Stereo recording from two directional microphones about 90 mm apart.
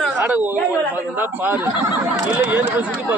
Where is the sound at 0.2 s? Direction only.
20° right (ahead or behind).